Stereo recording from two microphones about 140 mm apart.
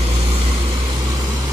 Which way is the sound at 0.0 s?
40° right (ahead or behind).